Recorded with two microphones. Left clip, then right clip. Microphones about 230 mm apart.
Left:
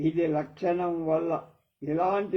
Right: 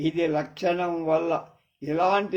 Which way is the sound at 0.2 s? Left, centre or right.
Right.